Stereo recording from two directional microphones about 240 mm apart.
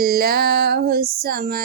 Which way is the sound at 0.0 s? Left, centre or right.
Right.